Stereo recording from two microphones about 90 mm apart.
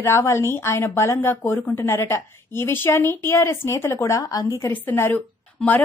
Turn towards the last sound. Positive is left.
turn(degrees=10)  # may be behind; listen again after turning